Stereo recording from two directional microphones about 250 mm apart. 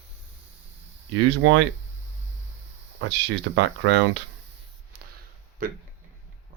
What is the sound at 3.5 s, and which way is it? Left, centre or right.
Speech, right.